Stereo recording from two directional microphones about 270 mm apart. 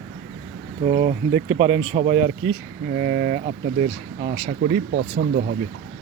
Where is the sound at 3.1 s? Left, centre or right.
Right.